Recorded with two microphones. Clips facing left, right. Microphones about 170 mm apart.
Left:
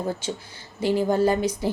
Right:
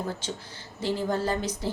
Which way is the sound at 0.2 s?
10° left (ahead or behind).